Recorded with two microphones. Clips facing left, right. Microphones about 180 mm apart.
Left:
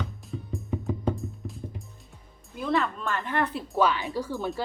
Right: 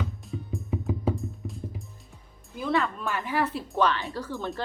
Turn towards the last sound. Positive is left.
turn(degrees=15)  # may be behind; listen again after turning